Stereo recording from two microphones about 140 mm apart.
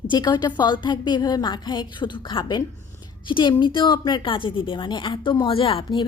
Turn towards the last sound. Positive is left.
turn(degrees=35)  # may be behind; listen again after turning